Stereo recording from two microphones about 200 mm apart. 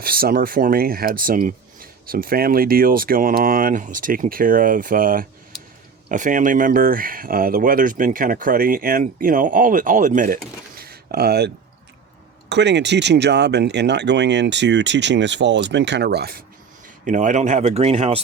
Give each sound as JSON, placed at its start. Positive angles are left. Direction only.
{"t": 0.0, "sound": "speech", "side_deg": -50}
{"t": 10.8, "sound": "a sound", "side_deg": -50}
{"t": 12.5, "sound": "speech", "side_deg": -60}
{"t": 17.1, "sound": "speech", "side_deg": -40}